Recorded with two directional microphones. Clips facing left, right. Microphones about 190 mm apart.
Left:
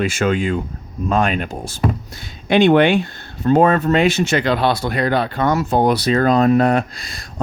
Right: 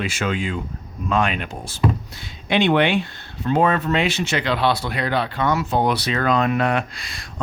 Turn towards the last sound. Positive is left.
turn(degrees=40)  # may be behind; listen again after turning